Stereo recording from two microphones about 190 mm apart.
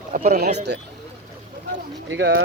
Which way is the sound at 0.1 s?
45° right (ahead or behind).